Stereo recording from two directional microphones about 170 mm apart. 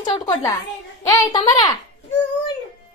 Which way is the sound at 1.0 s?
20° left (ahead or behind).